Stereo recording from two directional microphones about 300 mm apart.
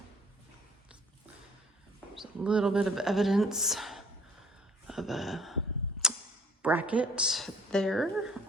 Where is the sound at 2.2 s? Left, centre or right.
Centre.